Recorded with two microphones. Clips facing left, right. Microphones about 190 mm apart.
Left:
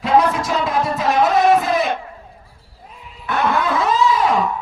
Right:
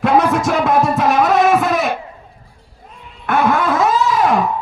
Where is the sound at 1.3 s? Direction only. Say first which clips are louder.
Right 1 dB; 75° right (ahead or behind).